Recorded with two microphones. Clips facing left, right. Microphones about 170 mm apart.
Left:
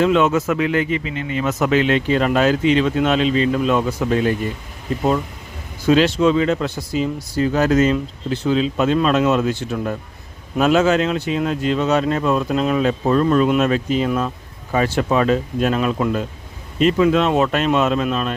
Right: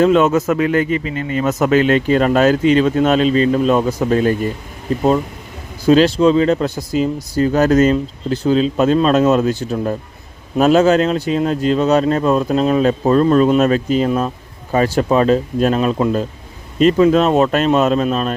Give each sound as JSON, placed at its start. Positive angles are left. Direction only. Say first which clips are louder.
{"t": 0.0, "sound": "speech", "louder": "right 3 dB", "side_deg": -40}
{"t": 5.8, "sound": "speech", "louder": "right 4 dB", "side_deg": -35}